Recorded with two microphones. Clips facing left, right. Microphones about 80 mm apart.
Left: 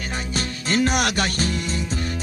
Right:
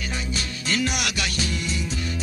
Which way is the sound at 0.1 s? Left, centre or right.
Left.